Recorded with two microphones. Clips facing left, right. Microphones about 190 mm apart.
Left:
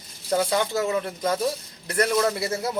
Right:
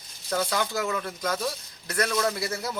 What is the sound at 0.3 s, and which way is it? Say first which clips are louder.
A man's voice: left 4 dB; 25° left (ahead or behind).